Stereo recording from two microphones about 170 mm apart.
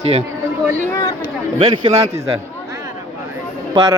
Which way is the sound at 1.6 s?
25° right (ahead or behind).